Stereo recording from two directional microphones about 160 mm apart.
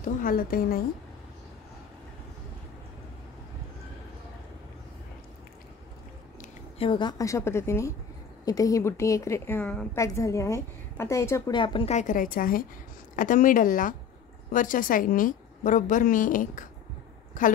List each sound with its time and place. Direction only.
0.0 s a woman's voice: 60° left (ahead or behind)
6.8 s a woman's voice: 30° left (ahead or behind)
11.5 s a woman's voice: 30° left (ahead or behind)
11.9 s a woman's voice: 50° left (ahead or behind)